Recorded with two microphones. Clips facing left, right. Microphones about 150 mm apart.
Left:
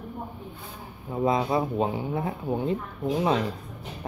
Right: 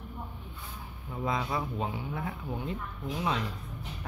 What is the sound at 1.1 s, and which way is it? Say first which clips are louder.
Speech: left 8 dB; 30° left (ahead or behind).